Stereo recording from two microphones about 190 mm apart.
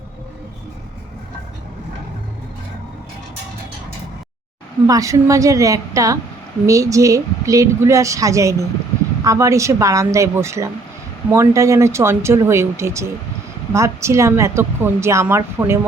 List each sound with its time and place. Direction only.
4.9 s speech: 15° right (ahead or behind)